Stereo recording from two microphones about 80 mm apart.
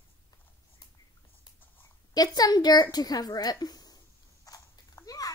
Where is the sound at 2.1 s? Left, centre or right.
Left.